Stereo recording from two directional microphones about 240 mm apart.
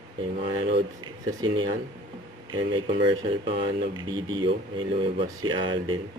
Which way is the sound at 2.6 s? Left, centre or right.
Right.